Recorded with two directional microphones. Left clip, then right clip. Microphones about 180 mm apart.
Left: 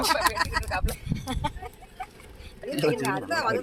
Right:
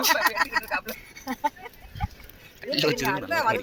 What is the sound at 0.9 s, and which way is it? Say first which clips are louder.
Speech: even; 75° left (ahead or behind).